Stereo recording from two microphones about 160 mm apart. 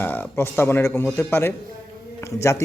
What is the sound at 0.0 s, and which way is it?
A man's voice, 10° left (ahead or behind).